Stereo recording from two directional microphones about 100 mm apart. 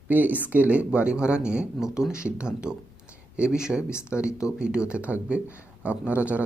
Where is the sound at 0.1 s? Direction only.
15° right (ahead or behind).